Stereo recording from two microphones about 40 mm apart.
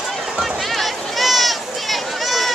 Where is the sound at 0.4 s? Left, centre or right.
Centre.